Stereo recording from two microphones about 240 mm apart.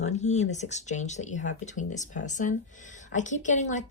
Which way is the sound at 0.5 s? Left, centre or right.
Left.